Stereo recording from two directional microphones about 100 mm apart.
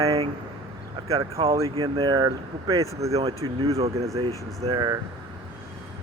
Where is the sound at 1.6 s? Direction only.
65° right (ahead or behind).